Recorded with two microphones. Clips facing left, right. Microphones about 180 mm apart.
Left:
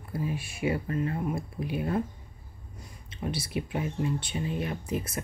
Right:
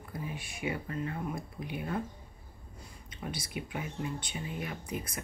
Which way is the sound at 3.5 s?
25° left (ahead or behind).